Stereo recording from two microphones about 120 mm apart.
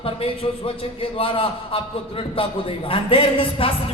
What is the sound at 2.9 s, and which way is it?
Speech, 50° left (ahead or behind).